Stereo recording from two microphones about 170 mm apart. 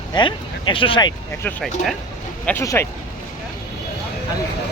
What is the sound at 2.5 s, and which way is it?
Speech, 15° left (ahead or behind).